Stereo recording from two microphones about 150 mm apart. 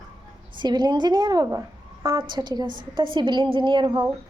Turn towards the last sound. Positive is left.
turn(degrees=-30)  # may be behind; listen again after turning